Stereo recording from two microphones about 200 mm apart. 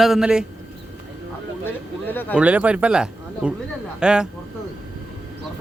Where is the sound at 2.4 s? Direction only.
5° right (ahead or behind).